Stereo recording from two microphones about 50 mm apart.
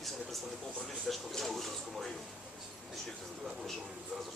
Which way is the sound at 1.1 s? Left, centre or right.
Centre.